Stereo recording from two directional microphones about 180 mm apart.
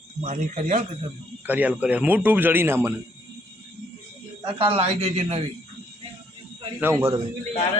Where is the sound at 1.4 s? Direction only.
10° right (ahead or behind).